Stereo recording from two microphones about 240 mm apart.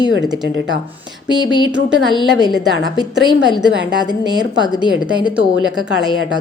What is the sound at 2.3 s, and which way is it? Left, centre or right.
A woman's voice, centre.